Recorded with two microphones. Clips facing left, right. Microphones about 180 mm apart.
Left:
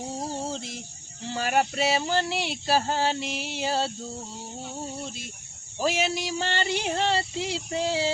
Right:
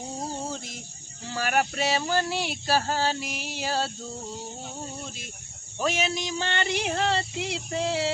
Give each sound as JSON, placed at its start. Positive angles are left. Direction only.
{"t": 0.2, "sound": "a sound", "side_deg": 25}
{"t": 1.2, "sound": "speech", "side_deg": 25}
{"t": 5.8, "sound": "speech", "side_deg": 30}